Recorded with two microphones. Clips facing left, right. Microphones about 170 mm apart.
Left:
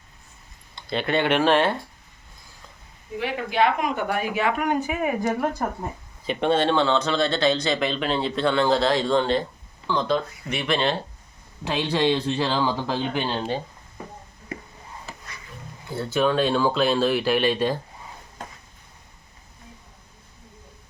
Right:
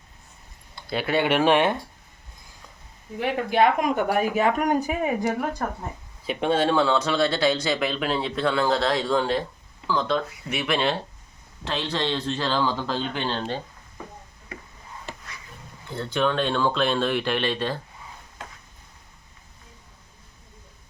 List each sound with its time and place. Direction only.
0.8 s speech: 5° right (ahead or behind)
3.2 s speech: 45° right (ahead or behind)
6.2 s speech: 5° right (ahead or behind)
11.6 s speech: 10° left (ahead or behind)
15.9 s speech: 5° left (ahead or behind)